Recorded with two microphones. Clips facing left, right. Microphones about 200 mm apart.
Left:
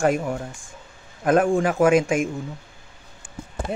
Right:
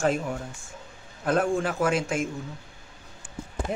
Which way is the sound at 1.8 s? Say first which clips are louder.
Left 10 dB; 15° left (ahead or behind).